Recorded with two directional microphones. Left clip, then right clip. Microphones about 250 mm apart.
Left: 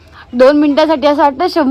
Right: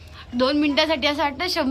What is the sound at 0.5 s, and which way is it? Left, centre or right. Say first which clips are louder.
Speech: left 10 dB; centre.